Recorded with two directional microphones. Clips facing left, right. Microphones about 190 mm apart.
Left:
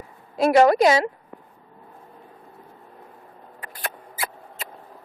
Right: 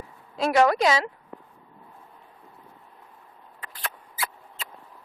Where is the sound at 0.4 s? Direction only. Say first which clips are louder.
Left 5 dB; 40° left (ahead or behind).